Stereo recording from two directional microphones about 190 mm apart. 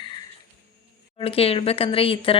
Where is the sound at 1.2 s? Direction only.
30° left (ahead or behind).